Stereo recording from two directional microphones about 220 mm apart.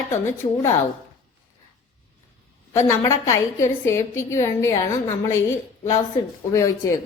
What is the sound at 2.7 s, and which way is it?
A woman's voice, 10° left (ahead or behind).